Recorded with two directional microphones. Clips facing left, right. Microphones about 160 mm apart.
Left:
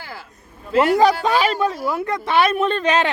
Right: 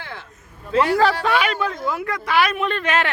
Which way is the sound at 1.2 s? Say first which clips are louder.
Left 2 dB; 25° left (ahead or behind).